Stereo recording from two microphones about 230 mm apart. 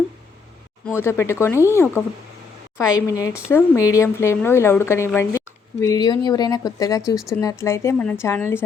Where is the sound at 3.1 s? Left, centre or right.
Centre.